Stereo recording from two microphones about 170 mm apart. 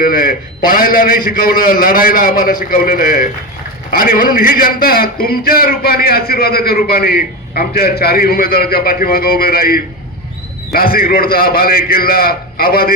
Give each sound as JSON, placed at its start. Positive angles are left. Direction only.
{"t": 0.0, "sound": "a man's voice", "side_deg": 55}